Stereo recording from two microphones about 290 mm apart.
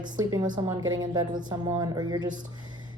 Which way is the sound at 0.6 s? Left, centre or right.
Centre.